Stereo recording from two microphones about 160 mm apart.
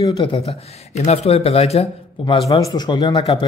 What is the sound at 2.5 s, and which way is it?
Speech, 20° left (ahead or behind).